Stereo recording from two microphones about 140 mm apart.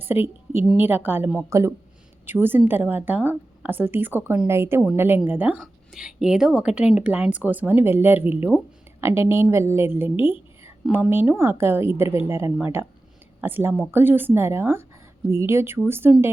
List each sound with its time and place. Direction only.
0.0 s a woman's voice: 15° right (ahead or behind)